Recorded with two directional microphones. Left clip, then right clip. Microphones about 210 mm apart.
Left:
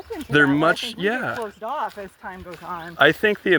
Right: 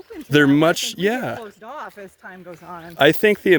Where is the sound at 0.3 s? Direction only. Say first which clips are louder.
Right 2 dB; 55° right (ahead or behind).